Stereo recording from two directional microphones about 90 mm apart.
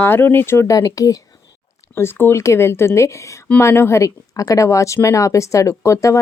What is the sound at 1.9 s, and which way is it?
Speech, 25° left (ahead or behind).